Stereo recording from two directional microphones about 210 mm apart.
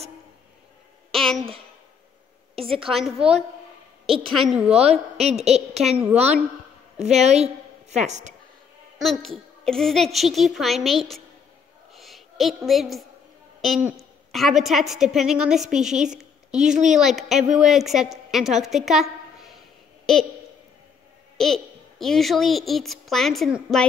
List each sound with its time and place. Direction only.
1.1 s a sound: centre (ahead or behind)
2.5 s a woman's voice: 25° right (ahead or behind)
2.9 s a child's voice: centre (ahead or behind)
3.2 s a woman's voice: 30° right (ahead or behind)
4.0 s a sound: 25° right (ahead or behind)
4.4 s a child's voice: centre (ahead or behind)
5.4 s a woman's voice: 30° right (ahead or behind)
5.9 s a child's voice: 5° right (ahead or behind)
7.0 s a woman's voice: 30° right (ahead or behind)
8.9 s a child's voice: centre (ahead or behind)
11.9 s a sound: centre (ahead or behind)
13.6 s a woman's voice: centre (ahead or behind)
21.4 s a child's voice: centre (ahead or behind)